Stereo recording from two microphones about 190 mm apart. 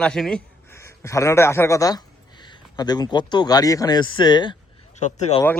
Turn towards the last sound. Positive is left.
turn(degrees=35)  # may be behind; listen again after turning